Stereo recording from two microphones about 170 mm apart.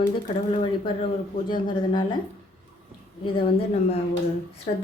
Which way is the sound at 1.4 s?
25° left (ahead or behind).